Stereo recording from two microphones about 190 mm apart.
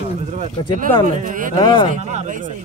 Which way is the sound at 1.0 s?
45° right (ahead or behind).